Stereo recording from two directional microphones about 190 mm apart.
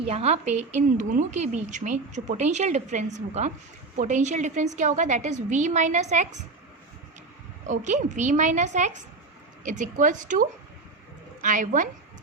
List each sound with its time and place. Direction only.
0.0 s a woman's voice: 30° right (ahead or behind)
7.7 s a woman's voice: 40° right (ahead or behind)
11.4 s a woman's voice: 45° right (ahead or behind)